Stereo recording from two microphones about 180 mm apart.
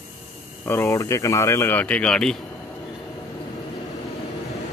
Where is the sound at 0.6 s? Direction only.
15° left (ahead or behind).